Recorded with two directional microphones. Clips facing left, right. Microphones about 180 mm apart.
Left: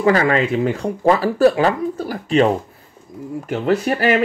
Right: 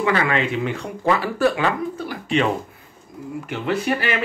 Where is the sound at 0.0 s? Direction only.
40° left (ahead or behind).